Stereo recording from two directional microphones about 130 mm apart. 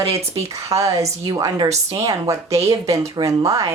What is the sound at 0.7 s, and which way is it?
Speech, 25° right (ahead or behind).